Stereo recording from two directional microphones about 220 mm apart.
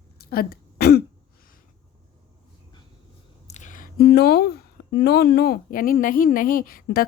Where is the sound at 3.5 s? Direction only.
35° left (ahead or behind).